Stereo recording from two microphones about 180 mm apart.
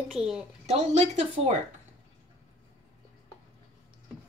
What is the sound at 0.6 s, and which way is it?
Speech, 35° right (ahead or behind).